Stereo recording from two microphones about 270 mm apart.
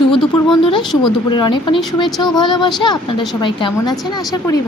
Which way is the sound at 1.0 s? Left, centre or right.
Centre.